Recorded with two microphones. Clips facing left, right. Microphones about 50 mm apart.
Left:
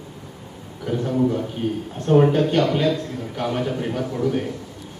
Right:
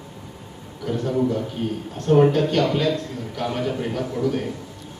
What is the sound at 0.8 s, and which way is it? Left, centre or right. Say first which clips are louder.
A man's voice: left 1 dB; centre.